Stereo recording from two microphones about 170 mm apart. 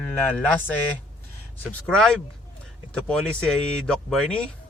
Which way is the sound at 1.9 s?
5° left (ahead or behind).